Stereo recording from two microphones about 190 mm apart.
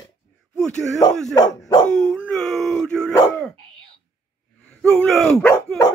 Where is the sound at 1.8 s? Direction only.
5° left (ahead or behind).